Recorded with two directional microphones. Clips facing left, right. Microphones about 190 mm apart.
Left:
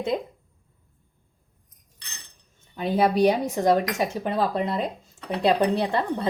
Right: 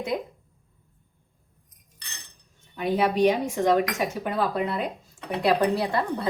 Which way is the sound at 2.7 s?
35° left (ahead or behind).